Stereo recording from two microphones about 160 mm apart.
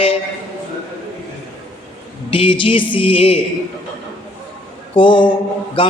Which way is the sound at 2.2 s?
35° left (ahead or behind).